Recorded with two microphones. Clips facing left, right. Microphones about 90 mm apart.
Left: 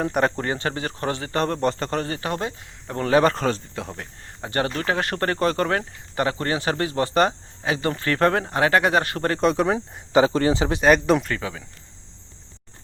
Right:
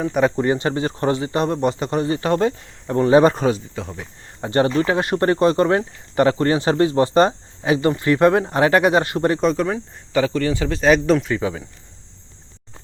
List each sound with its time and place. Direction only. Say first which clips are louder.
0.0 s speech: right 3 dB; centre (ahead or behind)
0.3 s speech: right 7 dB; 20° right (ahead or behind)
2.1 s speech: right 8 dB; 30° right (ahead or behind)
3.8 s speech: right 2 dB; centre (ahead or behind)
4.4 s speech: right 6 dB; 25° right (ahead or behind)
9.4 s speech: right 1 dB; 5° left (ahead or behind); by 10.8 s 20° left (ahead or behind)
10.8 s speech: right 3 dB; 5° left (ahead or behind)